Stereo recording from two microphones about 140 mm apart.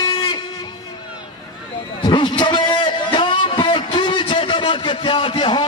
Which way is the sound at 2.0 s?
35° left (ahead or behind).